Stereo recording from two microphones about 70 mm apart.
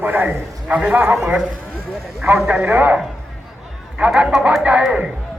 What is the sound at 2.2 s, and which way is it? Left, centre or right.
Speech, right.